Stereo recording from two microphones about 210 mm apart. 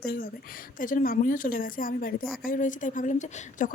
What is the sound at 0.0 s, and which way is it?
A woman's voice, 45° left (ahead or behind).